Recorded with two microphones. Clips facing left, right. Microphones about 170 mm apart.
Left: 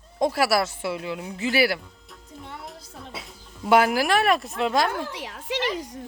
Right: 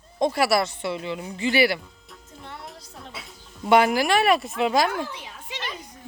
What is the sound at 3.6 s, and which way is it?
Speech, centre (ahead or behind).